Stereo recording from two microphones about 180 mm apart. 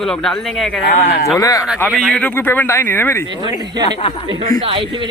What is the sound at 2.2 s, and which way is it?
Speech, 10° left (ahead or behind).